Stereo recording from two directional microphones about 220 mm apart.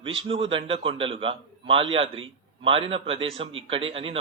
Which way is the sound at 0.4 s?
25° right (ahead or behind).